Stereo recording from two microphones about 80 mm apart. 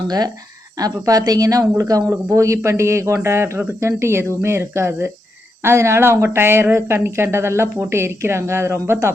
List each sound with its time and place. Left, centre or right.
0.8 s speech: right